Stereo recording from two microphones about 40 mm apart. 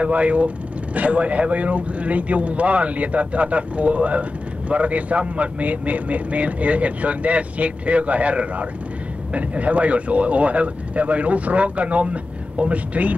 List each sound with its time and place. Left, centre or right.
0.0 s speech: right